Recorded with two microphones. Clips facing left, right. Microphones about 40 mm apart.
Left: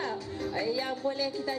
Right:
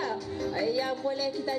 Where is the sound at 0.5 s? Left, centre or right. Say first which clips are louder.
Right 2 dB; centre.